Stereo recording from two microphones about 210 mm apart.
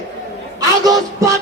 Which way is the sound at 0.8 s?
15° right (ahead or behind).